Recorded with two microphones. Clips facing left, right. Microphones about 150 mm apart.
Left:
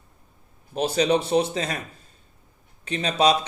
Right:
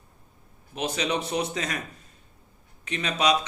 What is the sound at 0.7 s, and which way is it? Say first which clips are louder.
Speech: left 7 dB; 35° left (ahead or behind).